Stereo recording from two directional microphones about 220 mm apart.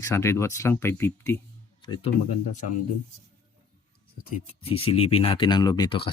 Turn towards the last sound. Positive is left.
turn(degrees=20)  # may be behind; listen again after turning